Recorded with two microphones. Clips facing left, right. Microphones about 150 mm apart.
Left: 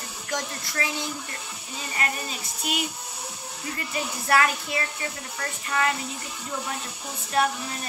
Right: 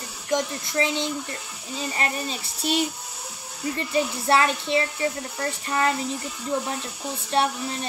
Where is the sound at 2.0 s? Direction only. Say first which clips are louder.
Even; 30° right (ahead or behind).